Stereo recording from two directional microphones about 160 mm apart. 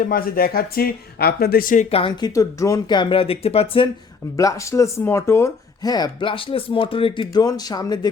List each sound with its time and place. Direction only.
0.0 s speech: 65° left (ahead or behind)
1.9 s speech: 35° left (ahead or behind)
2.3 s speech: 20° left (ahead or behind); by 3.8 s 35° left (ahead or behind)
4.4 s speech: 20° left (ahead or behind)